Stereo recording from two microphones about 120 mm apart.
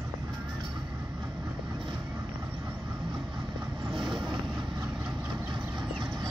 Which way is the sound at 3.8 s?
40° right (ahead or behind).